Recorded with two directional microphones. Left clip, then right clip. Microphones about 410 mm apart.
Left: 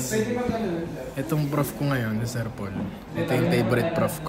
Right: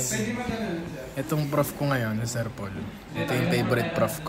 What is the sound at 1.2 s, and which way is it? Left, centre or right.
A man's voice, centre.